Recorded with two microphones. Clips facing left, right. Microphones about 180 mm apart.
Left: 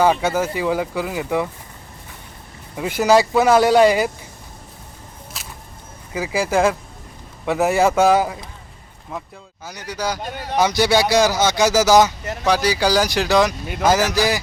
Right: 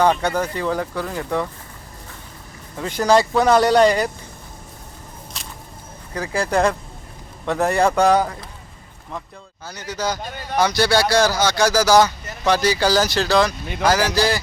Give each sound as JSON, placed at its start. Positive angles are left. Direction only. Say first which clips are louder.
{"t": 0.0, "sound": "speech", "louder": "left 1 dB", "side_deg": 5}
{"t": 2.7, "sound": "speech", "louder": "left 1 dB", "side_deg": 10}
{"t": 5.4, "sound": "whip", "louder": "even", "side_deg": 5}
{"t": 6.1, "sound": "speech", "louder": "left 1 dB", "side_deg": 5}
{"t": 10.0, "sound": "speech", "louder": "left 1 dB", "side_deg": 15}
{"t": 12.5, "sound": "speech", "louder": "even", "side_deg": 10}